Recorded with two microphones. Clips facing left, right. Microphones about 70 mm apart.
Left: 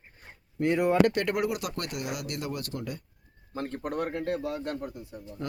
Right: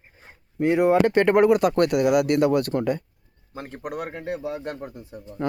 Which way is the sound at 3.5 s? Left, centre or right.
Centre.